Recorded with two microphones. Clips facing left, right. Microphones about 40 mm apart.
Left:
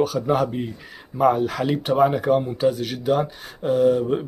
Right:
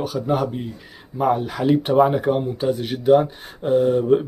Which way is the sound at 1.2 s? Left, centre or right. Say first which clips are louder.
Left 1 dB; centre.